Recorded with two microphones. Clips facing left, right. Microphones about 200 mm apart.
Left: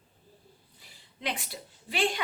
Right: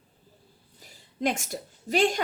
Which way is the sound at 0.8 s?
45° right (ahead or behind).